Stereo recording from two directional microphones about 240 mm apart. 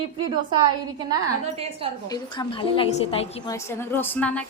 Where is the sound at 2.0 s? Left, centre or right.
Centre.